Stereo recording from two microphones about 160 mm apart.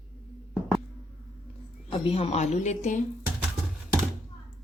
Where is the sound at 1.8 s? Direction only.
35° left (ahead or behind).